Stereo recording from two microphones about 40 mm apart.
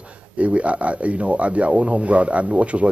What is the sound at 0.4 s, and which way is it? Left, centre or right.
Speech, right.